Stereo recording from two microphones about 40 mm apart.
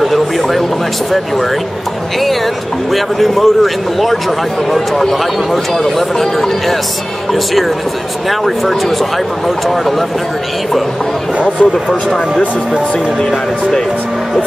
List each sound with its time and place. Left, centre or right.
0.0 s a sound: centre
2.9 s speech: centre
8.3 s speech: centre
11.3 s speech: right